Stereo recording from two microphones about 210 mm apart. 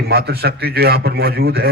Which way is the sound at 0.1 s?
50° right (ahead or behind).